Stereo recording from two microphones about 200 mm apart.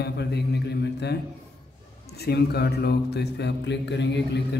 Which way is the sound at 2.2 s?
55° left (ahead or behind).